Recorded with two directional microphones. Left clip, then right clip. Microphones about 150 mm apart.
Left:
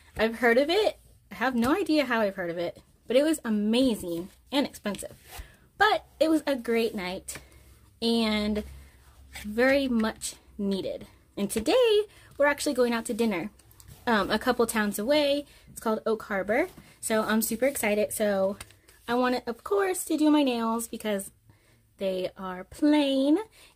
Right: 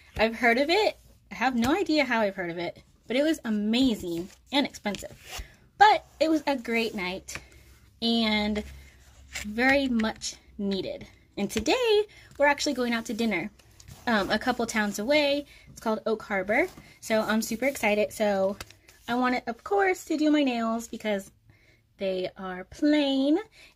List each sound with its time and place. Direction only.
0.2 s speech: 20° left (ahead or behind)